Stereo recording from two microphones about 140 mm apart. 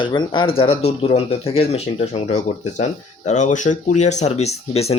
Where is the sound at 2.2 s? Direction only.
55° left (ahead or behind).